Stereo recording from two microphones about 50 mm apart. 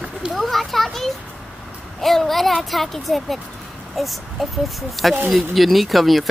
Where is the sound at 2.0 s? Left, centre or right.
Centre.